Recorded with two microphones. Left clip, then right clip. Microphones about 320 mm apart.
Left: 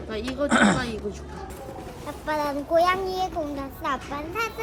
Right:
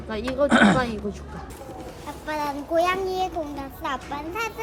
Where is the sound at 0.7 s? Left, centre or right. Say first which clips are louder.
Right 4 dB; centre.